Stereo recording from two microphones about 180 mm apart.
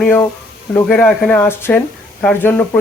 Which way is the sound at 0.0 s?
10° left (ahead or behind).